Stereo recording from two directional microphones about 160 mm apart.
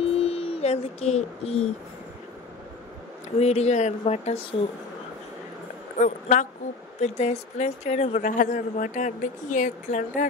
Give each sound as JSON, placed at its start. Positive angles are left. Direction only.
{"t": 0.1, "sound": "a sound", "side_deg": 40}
{"t": 3.3, "sound": "speech", "side_deg": 40}
{"t": 5.9, "sound": "a woman's voice", "side_deg": 50}